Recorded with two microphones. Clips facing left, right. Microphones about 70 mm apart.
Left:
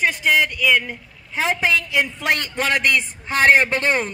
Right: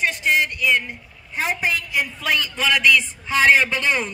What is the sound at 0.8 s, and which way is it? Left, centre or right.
A woman's voice, left.